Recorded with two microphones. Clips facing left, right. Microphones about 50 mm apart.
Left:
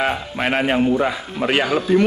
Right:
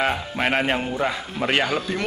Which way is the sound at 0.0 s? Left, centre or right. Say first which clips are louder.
Left 2 dB; centre.